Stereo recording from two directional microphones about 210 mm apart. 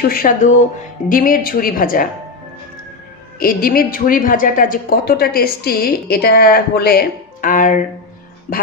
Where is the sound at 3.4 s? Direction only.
45° left (ahead or behind).